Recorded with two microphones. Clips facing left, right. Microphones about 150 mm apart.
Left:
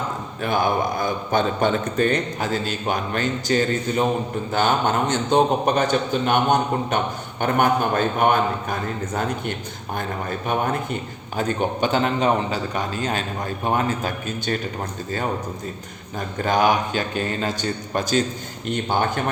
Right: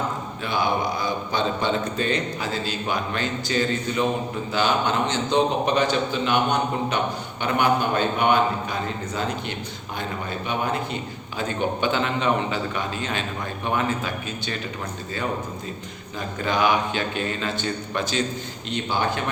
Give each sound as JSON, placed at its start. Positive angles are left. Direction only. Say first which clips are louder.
{"t": 0.4, "sound": "a man's voice", "louder": "left 3 dB", "side_deg": 50}
{"t": 16.1, "sound": "a man's voice", "louder": "left 3 dB", "side_deg": 45}